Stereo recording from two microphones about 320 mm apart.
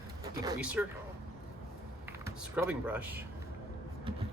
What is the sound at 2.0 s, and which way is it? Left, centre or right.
Speech, centre.